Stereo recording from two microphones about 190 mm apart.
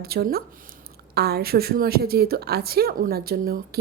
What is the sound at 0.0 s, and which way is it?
A woman's voice, 55° right (ahead or behind).